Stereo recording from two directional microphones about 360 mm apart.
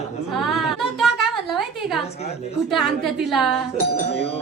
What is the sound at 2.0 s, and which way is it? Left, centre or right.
Speech, centre.